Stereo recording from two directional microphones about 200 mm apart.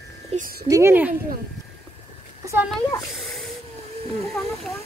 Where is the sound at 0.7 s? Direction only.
10° right (ahead or behind).